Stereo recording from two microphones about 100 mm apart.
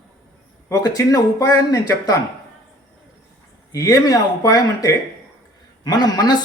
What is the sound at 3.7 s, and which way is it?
Speech, 35° left (ahead or behind).